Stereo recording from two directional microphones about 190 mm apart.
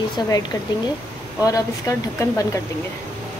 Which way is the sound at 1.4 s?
20° left (ahead or behind).